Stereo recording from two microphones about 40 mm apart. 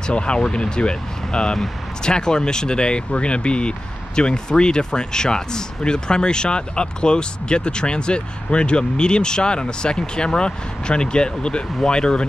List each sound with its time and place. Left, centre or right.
0.0 s speech: left